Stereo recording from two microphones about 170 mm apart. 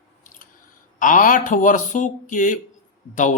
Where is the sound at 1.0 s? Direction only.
50° left (ahead or behind).